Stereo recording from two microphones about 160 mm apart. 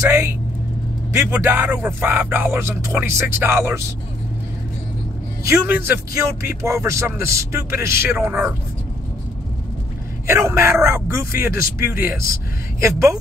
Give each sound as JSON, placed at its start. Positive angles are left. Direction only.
{"t": 0.0, "sound": "speech", "side_deg": -15}
{"t": 5.5, "sound": "speech", "side_deg": -15}
{"t": 10.2, "sound": "speech", "side_deg": -15}